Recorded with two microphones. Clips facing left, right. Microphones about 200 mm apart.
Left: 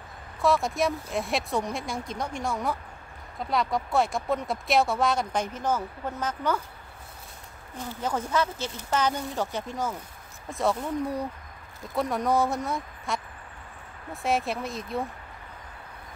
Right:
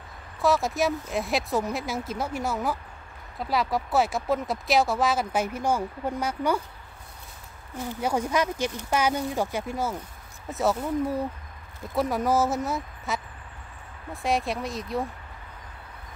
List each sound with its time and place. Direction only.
0.4 s speech: centre (ahead or behind)
7.9 s speech: 10° right (ahead or behind)